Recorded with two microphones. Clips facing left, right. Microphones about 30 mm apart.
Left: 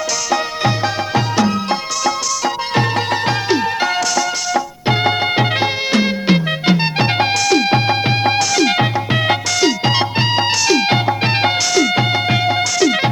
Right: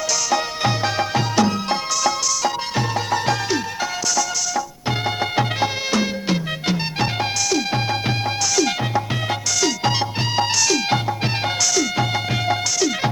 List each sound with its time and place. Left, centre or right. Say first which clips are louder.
1.1 s music: left 5 dB; left
7.8 s music: left 6 dB; left
9.6 s music: left 3 dB; left
12.1 s music: left 5 dB; left
12.5 s music: left 6 dB; left